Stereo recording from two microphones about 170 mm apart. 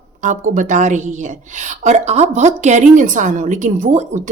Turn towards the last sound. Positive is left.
turn(degrees=-45)  # may be behind; listen again after turning